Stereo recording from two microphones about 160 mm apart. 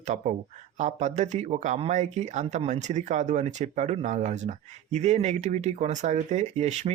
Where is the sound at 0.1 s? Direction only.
45° right (ahead or behind).